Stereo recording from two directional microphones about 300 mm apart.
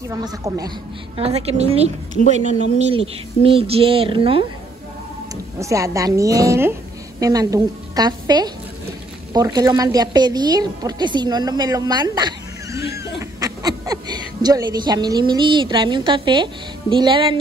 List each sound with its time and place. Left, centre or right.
0.1 s a woman's voice: centre
5.6 s a woman's voice: centre